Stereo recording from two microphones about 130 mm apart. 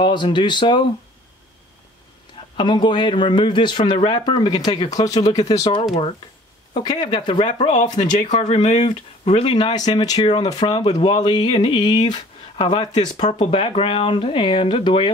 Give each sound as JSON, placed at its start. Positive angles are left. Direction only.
{"t": 0.0, "sound": "speech", "side_deg": 35}
{"t": 2.5, "sound": "speech", "side_deg": 35}
{"t": 8.0, "sound": "speech", "side_deg": 75}
{"t": 8.5, "sound": "speech", "side_deg": 55}